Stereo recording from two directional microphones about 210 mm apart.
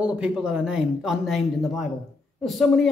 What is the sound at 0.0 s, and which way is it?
A man's voice, 5° right (ahead or behind).